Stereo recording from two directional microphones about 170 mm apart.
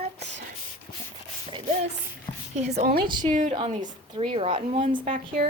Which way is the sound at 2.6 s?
40° right (ahead or behind).